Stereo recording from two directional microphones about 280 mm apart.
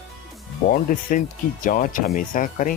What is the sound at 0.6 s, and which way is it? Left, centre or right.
Speech, left.